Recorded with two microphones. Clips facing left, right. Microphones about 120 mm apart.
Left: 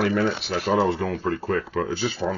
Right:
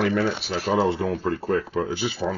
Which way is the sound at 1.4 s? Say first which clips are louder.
Right 1 dB; 15° right (ahead or behind).